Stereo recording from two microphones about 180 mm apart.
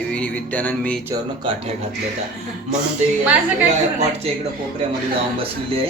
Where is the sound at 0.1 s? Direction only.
10° left (ahead or behind).